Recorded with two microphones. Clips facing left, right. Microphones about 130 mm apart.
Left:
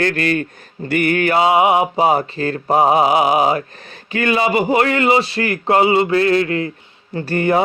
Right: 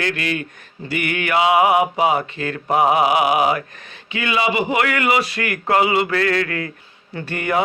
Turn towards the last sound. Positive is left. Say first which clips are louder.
# left 5 dB
turn(degrees=30)  # may be behind; listen again after turning